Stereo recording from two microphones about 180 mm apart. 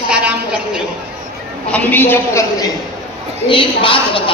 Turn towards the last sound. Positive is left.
turn(degrees=30)  # may be behind; listen again after turning